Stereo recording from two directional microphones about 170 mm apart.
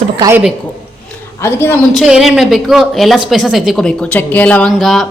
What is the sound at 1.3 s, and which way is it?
Speech, 15° left (ahead or behind).